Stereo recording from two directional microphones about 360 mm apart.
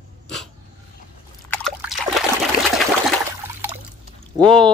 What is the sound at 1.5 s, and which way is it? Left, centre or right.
Liquid, centre.